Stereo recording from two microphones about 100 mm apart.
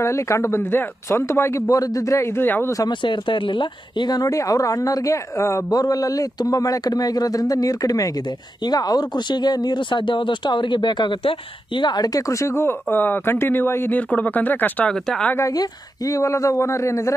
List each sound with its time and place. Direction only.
0.0 s a man's voice: 30° left (ahead or behind)
2.8 s speech: 50° left (ahead or behind); by 15.3 s 5° left (ahead or behind)
15.3 s speech: 35° left (ahead or behind)